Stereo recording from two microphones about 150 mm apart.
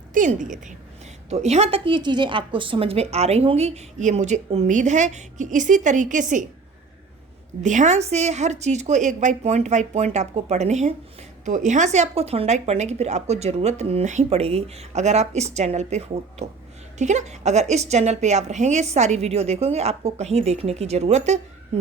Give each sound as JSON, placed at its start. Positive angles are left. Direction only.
{"t": 0.1, "sound": "a woman's voice", "side_deg": -60}
{"t": 1.3, "sound": "a woman's voice", "side_deg": -45}
{"t": 7.6, "sound": "a woman's voice", "side_deg": -55}